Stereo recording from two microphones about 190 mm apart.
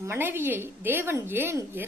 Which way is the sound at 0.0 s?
15° right (ahead or behind).